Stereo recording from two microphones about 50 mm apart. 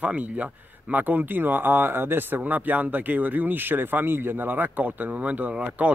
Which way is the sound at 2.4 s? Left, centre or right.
Right.